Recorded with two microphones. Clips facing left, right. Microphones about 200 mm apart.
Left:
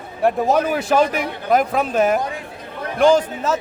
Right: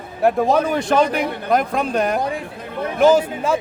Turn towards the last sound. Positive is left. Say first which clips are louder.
# right 1 dB
turn(degrees=-10)  # may be behind; listen again after turning